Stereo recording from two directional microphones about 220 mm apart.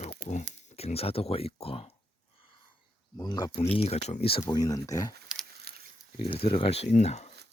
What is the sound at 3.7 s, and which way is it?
Speech, 30° left (ahead or behind).